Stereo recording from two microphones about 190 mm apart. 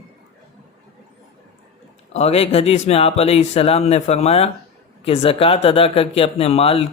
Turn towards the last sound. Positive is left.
turn(degrees=30)  # may be behind; listen again after turning